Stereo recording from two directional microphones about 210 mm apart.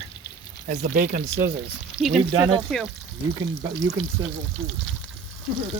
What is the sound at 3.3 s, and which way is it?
Speech, 20° right (ahead or behind).